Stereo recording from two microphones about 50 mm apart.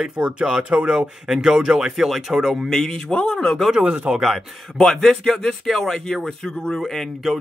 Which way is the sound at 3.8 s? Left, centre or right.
Right.